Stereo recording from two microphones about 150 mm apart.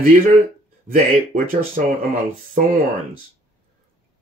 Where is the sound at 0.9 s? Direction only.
65° right (ahead or behind).